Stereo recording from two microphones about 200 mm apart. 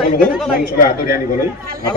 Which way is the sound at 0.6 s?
45° left (ahead or behind).